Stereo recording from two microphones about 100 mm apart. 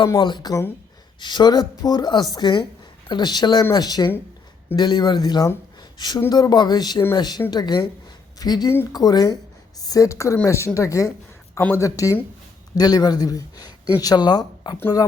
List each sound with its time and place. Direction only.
0.2 s a woman's voice: 50° left (ahead or behind)